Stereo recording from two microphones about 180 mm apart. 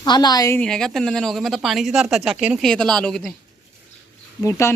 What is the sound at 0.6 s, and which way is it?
Speech, 5° left (ahead or behind).